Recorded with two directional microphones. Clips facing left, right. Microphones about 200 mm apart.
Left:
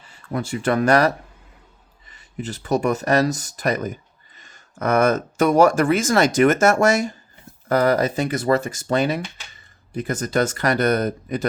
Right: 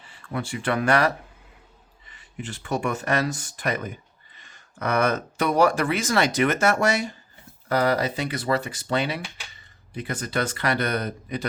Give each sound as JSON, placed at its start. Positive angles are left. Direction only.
{"t": 0.0, "sound": "speech", "side_deg": 40}